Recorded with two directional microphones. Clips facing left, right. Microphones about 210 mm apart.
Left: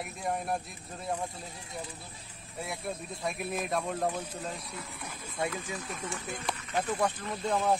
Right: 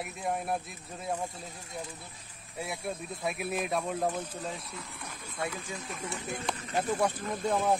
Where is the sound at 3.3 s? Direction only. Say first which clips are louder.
Right 1 dB; 5° right (ahead or behind).